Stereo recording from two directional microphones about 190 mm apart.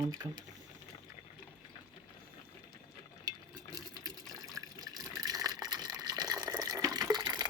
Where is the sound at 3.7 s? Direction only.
20° right (ahead or behind).